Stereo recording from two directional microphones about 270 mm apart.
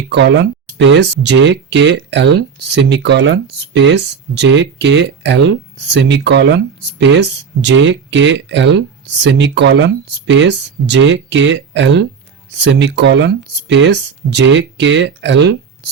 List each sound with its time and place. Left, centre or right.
0.1 s speech: right